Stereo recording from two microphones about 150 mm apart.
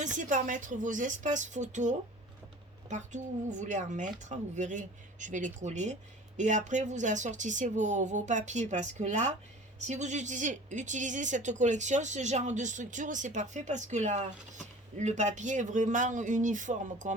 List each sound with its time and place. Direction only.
0.2 s speech: 60° right (ahead or behind)